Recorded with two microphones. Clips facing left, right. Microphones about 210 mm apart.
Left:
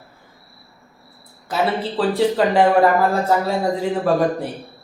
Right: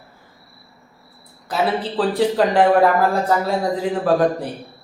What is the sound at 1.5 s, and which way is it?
A woman's voice, centre (ahead or behind).